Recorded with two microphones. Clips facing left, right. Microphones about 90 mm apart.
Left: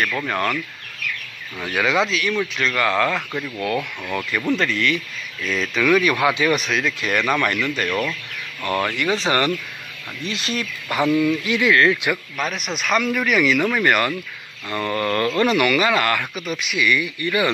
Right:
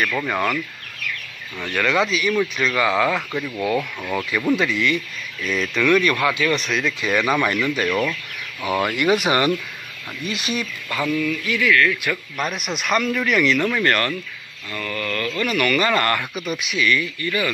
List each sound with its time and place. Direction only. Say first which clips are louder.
0.0 s speech: right 1 dB; 5° right (ahead or behind)
1.6 s speech: even; 10° left (ahead or behind)
6.1 s speech: left 2 dB; 20° left (ahead or behind)
6.5 s speech: left 1 dB; 5° left (ahead or behind)
10.9 s speech: left 5 dB; 20° left (ahead or behind)
12.4 s speech: even; centre (ahead or behind)
14.7 s speech: left 5 dB; 30° left (ahead or behind)
15.7 s speech: left 1 dB; 5° left (ahead or behind)
16.8 s speech: left 1 dB; 15° left (ahead or behind)